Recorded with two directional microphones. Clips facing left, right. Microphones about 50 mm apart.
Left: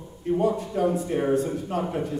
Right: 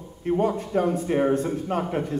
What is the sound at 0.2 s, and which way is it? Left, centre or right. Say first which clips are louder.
A man's voice: even; right.